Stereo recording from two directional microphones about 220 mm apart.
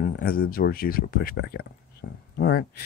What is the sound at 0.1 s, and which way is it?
Speech, 45° left (ahead or behind).